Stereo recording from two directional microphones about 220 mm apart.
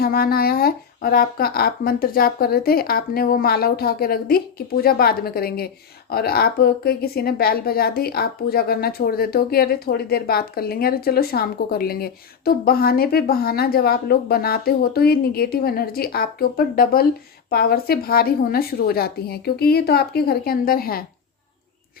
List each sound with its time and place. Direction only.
0.0 s speech: 45° left (ahead or behind)